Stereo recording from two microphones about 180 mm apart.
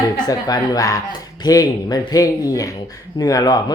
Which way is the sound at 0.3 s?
20° left (ahead or behind).